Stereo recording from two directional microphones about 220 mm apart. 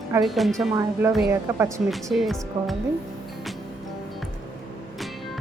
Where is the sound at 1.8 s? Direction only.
Centre (ahead or behind).